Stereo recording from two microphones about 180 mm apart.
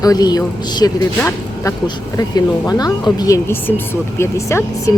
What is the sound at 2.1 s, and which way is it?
A woman's voice, 20° left (ahead or behind).